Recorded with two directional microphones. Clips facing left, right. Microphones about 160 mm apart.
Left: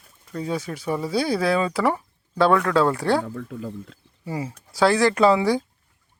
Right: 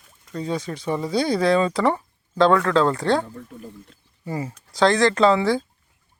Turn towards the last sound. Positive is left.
turn(degrees=15)  # may be behind; listen again after turning